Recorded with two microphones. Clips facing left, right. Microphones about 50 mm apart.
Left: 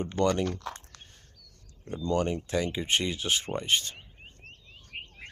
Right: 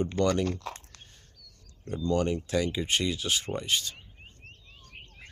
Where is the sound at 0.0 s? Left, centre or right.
Centre.